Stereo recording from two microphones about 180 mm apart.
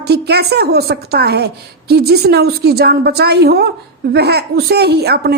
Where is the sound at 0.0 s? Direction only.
65° right (ahead or behind).